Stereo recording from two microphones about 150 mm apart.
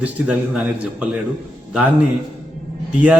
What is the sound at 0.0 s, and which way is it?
A man's voice, 10° right (ahead or behind).